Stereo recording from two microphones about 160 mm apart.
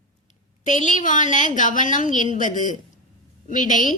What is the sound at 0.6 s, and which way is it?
A woman's voice, 50° left (ahead or behind).